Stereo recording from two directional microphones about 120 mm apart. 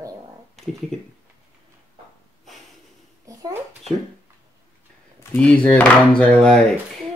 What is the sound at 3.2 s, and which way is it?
Babbling, 25° right (ahead or behind).